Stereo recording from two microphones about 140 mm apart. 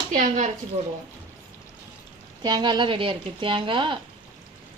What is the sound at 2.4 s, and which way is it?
Speech, 30° right (ahead or behind).